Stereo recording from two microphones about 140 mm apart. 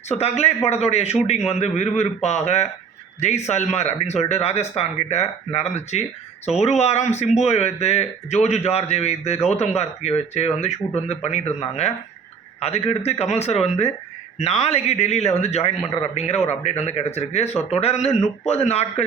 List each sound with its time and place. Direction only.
0.1 s speech: 50° left (ahead or behind)